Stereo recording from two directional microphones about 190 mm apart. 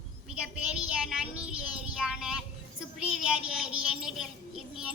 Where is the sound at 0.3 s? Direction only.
5° right (ahead or behind).